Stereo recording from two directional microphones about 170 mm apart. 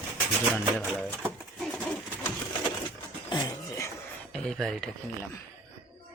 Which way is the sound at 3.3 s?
25° left (ahead or behind).